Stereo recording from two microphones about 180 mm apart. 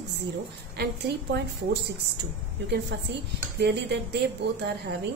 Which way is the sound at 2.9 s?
65° right (ahead or behind).